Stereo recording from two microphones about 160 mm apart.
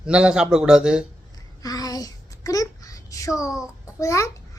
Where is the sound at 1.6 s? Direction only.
25° left (ahead or behind).